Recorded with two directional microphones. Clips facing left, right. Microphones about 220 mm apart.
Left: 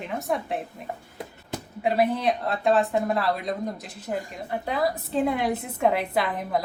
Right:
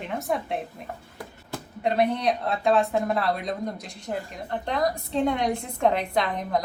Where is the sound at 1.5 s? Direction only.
20° left (ahead or behind).